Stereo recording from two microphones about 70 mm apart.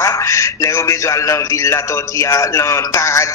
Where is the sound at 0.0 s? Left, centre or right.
Left.